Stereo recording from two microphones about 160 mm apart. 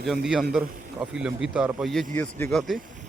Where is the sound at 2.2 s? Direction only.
10° left (ahead or behind).